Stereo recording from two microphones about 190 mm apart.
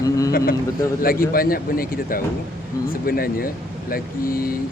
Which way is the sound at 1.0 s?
50° left (ahead or behind).